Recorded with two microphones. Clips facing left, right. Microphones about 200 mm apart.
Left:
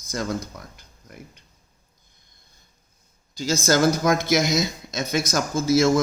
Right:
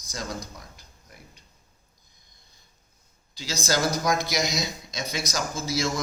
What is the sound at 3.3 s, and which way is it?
Speech, 45° left (ahead or behind).